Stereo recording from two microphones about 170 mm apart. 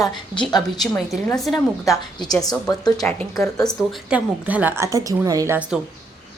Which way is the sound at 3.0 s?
10° left (ahead or behind).